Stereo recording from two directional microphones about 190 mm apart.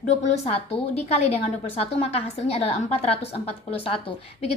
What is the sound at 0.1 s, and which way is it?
A woman's voice, 35° left (ahead or behind).